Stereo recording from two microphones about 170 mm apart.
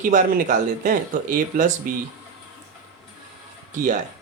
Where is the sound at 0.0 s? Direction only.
50° right (ahead or behind).